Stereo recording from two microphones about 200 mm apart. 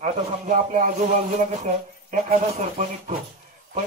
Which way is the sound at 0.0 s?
35° right (ahead or behind).